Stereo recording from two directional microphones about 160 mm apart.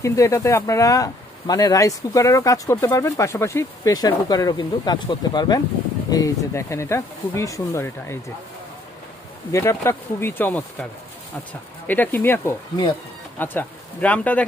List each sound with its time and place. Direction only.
0.0 s speech: 20° left (ahead or behind)
9.5 s speech: 15° left (ahead or behind)
11.9 s speech: 10° left (ahead or behind)